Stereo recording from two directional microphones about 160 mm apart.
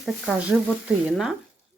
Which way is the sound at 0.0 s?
5° right (ahead or behind).